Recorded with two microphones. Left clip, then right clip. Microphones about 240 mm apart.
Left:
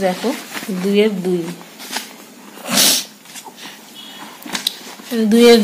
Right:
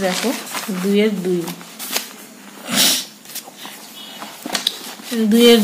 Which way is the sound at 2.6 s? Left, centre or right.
Centre.